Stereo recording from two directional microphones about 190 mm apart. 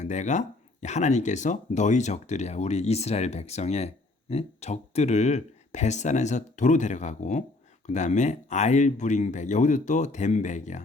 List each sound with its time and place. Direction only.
0.0 s speech: 40° left (ahead or behind)